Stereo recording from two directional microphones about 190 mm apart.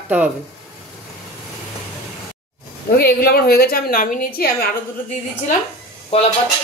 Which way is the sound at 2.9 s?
55° left (ahead or behind).